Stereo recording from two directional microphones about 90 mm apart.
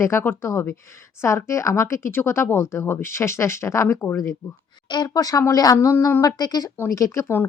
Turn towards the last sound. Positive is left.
turn(degrees=40)  # may be behind; listen again after turning